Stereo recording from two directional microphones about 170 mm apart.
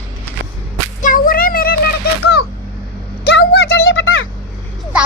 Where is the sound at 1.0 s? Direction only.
55° left (ahead or behind).